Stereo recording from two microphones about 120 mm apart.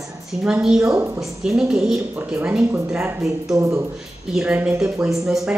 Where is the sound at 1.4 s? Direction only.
5° right (ahead or behind).